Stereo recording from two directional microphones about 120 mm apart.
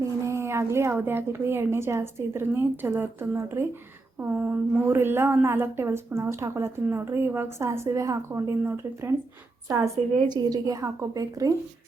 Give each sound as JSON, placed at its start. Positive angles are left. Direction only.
{"t": 0.0, "sound": "a woman's voice", "side_deg": -20}
{"t": 10.2, "sound": "a woman's voice", "side_deg": -35}